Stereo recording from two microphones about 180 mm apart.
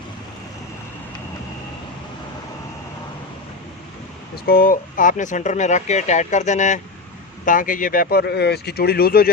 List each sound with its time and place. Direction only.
4.4 s speech: 55° left (ahead or behind)